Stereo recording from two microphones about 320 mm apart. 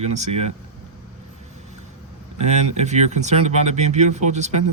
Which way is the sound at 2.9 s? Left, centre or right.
Right.